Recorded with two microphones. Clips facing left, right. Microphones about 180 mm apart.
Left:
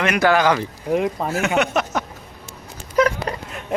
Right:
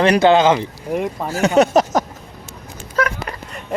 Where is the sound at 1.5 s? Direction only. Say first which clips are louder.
Right 10 dB; 35° right (ahead or behind).